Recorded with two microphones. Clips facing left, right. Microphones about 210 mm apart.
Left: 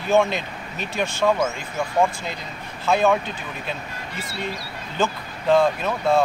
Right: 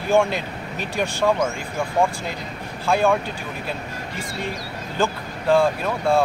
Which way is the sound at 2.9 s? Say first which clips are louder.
Even; 10° right (ahead or behind).